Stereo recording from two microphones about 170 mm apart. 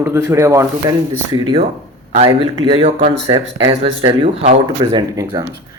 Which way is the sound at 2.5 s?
35° right (ahead or behind).